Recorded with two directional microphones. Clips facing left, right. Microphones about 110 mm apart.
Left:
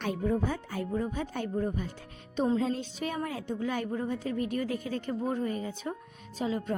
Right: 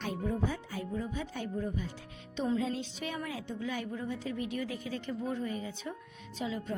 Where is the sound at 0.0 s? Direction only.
65° left (ahead or behind); by 6.0 s 45° left (ahead or behind).